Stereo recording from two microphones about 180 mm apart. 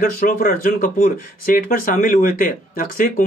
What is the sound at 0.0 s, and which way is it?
Speech, 50° left (ahead or behind).